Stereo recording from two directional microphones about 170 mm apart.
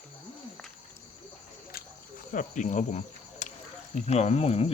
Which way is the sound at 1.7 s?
55° left (ahead or behind).